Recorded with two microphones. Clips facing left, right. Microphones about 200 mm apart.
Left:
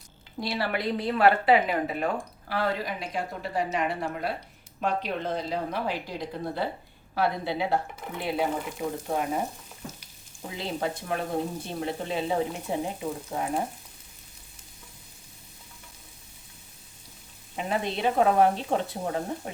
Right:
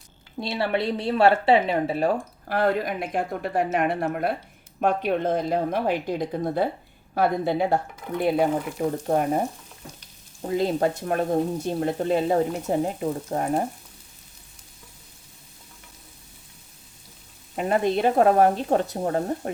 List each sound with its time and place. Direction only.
0.3 s speech: 25° right (ahead or behind)
2.5 s speech: 50° right (ahead or behind)
10.4 s speech: 45° right (ahead or behind)
17.6 s speech: 45° right (ahead or behind)